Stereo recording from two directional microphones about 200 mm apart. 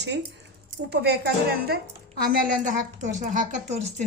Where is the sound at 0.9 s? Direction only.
55° right (ahead or behind).